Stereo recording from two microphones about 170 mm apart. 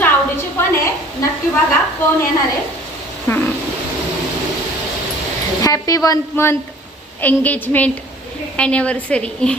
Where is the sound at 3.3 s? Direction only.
10° left (ahead or behind).